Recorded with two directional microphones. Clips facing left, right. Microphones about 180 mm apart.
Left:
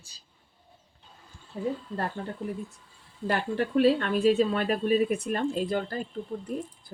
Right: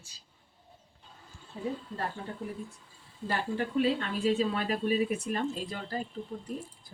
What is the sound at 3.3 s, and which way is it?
Speech, 70° left (ahead or behind).